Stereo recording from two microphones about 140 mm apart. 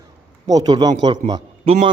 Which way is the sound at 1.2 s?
60° right (ahead or behind).